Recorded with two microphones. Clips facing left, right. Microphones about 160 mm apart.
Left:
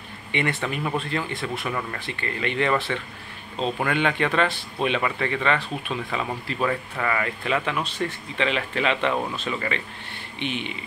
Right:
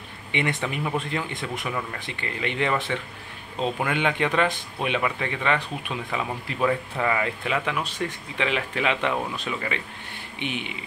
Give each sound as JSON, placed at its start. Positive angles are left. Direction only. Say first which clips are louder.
{"t": 0.3, "sound": "speech", "louder": "left 1 dB", "side_deg": -15}
{"t": 1.7, "sound": "speech", "louder": "right 1 dB", "side_deg": -5}
{"t": 2.0, "sound": "speech", "louder": "left 2 dB", "side_deg": -15}